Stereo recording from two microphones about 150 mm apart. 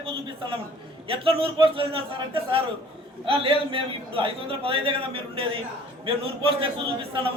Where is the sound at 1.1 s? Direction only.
35° right (ahead or behind).